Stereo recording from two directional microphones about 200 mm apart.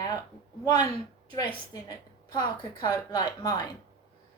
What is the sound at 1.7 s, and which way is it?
A woman's voice, 20° left (ahead or behind).